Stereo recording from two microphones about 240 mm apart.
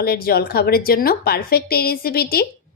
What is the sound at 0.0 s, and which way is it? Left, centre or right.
A woman's voice, left.